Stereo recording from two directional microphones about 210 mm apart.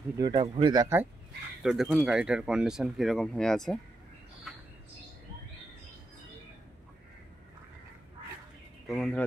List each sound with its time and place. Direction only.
0.2 s speech: 20° right (ahead or behind)
1.6 s speech: centre (ahead or behind)
8.8 s speech: centre (ahead or behind)